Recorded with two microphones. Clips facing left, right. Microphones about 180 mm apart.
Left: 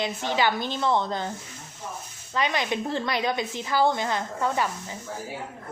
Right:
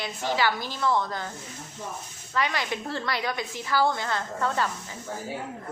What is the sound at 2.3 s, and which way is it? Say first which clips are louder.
A woman's voice: left 2 dB; 20° left (ahead or behind).